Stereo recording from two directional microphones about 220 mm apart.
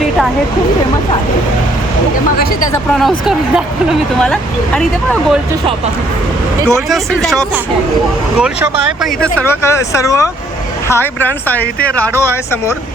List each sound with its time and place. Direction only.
2.4 s speech: 40° left (ahead or behind)
2.9 s speech: centre (ahead or behind)
6.7 s speech: centre (ahead or behind)
9.2 s speech: 10° left (ahead or behind)